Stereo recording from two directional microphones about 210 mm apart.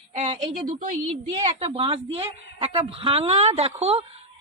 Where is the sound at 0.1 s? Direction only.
35° right (ahead or behind).